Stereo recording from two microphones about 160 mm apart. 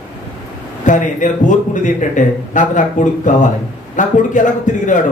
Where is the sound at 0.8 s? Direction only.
50° left (ahead or behind).